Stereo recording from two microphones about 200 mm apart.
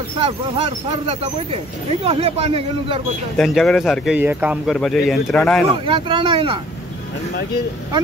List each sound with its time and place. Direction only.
0.2 s speech: 30° right (ahead or behind)
3.3 s speech: centre (ahead or behind)
5.9 s speech: 25° right (ahead or behind)